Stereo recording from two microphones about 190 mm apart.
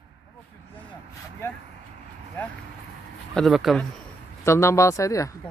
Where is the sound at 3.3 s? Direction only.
Centre (ahead or behind).